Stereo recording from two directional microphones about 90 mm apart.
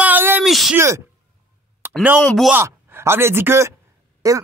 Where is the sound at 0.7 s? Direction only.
35° right (ahead or behind).